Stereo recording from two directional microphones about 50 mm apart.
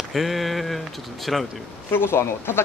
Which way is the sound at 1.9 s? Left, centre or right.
Left.